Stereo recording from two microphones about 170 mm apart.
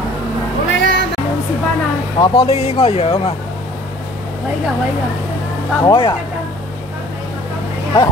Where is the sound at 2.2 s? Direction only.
20° left (ahead or behind).